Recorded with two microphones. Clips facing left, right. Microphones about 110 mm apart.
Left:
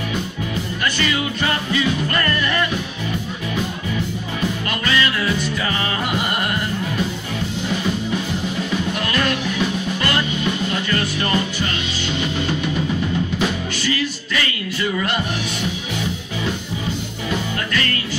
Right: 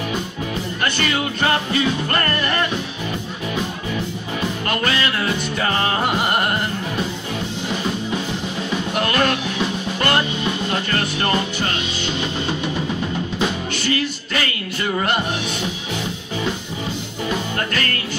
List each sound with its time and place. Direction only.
0.8 s music: 50° right (ahead or behind)
4.6 s music: 50° right (ahead or behind)
8.9 s music: 45° right (ahead or behind)
13.7 s music: 50° right (ahead or behind)
17.6 s music: 45° right (ahead or behind)